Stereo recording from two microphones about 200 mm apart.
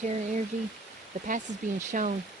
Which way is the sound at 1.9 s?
40° right (ahead or behind).